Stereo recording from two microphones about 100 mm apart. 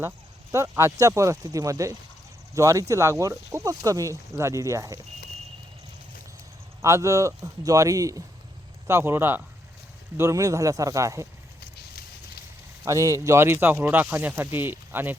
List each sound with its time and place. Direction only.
0.5 s speech: 30° right (ahead or behind)
6.8 s speech: 30° right (ahead or behind)
8.9 s speech: 25° right (ahead or behind)
12.8 s speech: 35° right (ahead or behind)